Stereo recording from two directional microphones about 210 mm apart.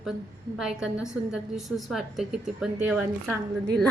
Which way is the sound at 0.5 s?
5° right (ahead or behind).